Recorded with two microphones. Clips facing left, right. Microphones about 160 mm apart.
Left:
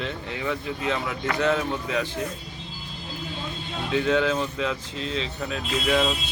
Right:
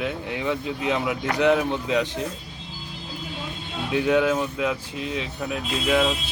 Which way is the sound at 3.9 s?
10° right (ahead or behind).